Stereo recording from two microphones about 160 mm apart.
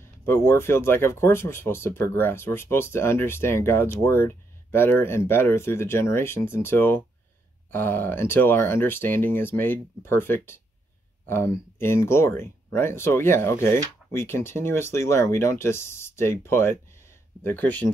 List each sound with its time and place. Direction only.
0.2 s speech: 15° left (ahead or behind)